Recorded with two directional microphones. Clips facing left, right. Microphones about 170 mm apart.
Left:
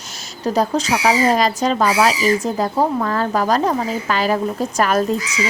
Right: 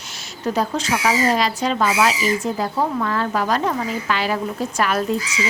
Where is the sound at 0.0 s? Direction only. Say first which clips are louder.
Left 2 dB; 40° left (ahead or behind).